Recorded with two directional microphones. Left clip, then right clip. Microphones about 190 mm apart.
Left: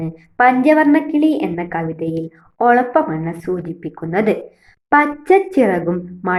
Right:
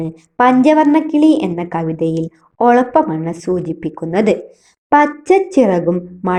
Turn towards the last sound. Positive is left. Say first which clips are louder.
# right 3 dB
turn(degrees=-30)  # may be behind; listen again after turning